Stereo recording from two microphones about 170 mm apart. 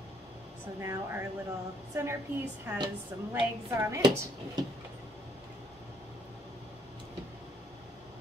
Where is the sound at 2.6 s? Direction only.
15° right (ahead or behind).